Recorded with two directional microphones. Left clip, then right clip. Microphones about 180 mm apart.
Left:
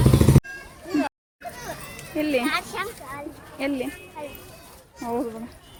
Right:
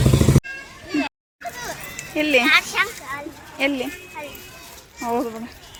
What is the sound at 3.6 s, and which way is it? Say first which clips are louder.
Speech: right 5 dB; 10° right (ahead or behind).